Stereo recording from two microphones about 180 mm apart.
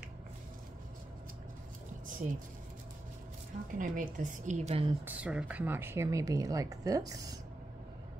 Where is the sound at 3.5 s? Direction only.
40° right (ahead or behind).